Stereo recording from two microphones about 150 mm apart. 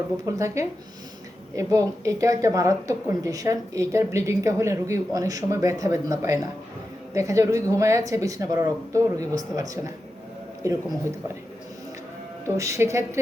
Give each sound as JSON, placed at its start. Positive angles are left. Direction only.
{"t": 0.3, "sound": "a woman's voice", "side_deg": -20}
{"t": 12.5, "sound": "a woman's voice", "side_deg": -20}